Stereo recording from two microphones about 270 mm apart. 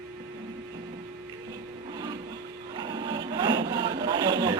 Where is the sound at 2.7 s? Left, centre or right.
Centre.